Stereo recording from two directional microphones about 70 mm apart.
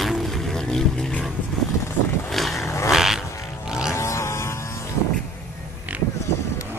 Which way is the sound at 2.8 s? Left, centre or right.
Centre.